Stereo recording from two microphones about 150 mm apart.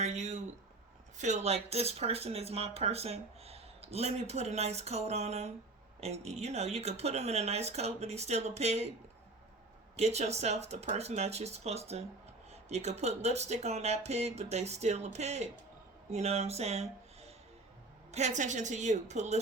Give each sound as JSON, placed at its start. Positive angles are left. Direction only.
{"t": 0.0, "sound": "a sound", "side_deg": -50}
{"t": 1.2, "sound": "speech", "side_deg": -50}
{"t": 9.9, "sound": "speech", "side_deg": -45}